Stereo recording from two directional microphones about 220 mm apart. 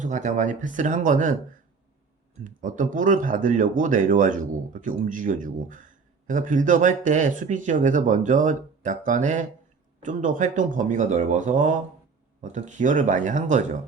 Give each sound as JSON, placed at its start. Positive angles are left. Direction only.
{"t": 0.0, "sound": "speech", "side_deg": -35}
{"t": 2.4, "sound": "speech", "side_deg": -35}